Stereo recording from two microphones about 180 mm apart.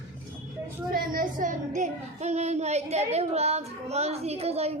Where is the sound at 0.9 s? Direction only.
50° right (ahead or behind).